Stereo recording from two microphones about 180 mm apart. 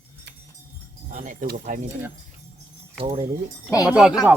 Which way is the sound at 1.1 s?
45° right (ahead or behind).